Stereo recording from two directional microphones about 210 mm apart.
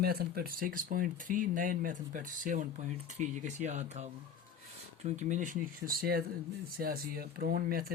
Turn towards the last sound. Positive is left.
turn(degrees=-45)  # may be behind; listen again after turning